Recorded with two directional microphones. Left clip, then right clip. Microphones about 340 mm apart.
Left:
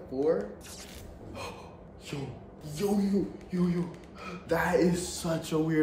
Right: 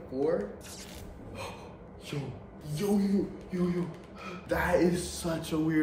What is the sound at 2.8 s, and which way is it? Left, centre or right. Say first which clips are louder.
A man's voice: even; centre.